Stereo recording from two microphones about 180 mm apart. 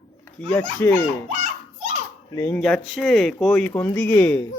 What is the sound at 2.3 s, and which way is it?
Speech, 15° left (ahead or behind).